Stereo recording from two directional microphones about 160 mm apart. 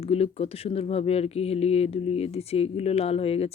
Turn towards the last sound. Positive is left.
turn(degrees=40)  # may be behind; listen again after turning